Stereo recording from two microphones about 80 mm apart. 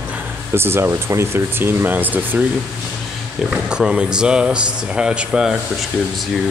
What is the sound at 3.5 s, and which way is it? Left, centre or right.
Speech, centre.